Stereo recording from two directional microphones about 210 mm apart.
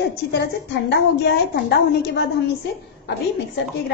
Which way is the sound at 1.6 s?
50° left (ahead or behind).